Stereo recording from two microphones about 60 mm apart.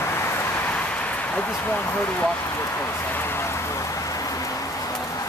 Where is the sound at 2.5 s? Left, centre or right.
Left.